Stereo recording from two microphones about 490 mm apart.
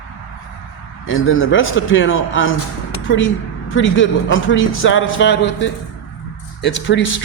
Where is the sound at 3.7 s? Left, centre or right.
Left.